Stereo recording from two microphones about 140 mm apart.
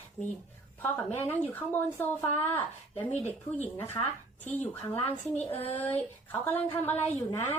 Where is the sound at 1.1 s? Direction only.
15° left (ahead or behind).